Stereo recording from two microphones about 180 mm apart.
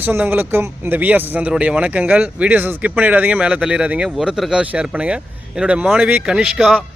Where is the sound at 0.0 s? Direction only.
10° right (ahead or behind).